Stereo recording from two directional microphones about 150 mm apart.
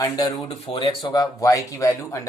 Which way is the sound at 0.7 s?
30° left (ahead or behind).